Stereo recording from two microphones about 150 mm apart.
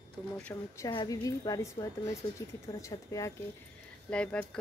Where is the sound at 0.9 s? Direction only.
25° left (ahead or behind).